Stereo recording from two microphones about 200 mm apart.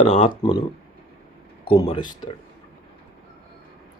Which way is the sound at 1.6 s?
20° left (ahead or behind).